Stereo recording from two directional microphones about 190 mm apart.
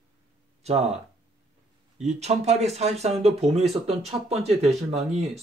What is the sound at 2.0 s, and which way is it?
Speech, 35° right (ahead or behind).